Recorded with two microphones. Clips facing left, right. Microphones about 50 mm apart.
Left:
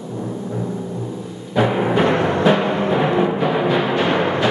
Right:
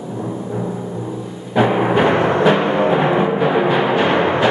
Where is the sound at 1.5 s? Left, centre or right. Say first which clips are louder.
Right 2 dB; centre.